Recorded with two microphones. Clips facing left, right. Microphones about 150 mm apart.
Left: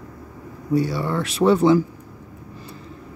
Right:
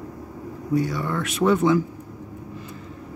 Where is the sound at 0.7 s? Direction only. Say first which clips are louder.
Left 2 dB; 30° left (ahead or behind).